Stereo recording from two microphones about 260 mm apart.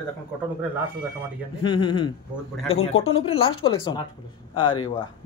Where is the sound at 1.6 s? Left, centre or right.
Centre.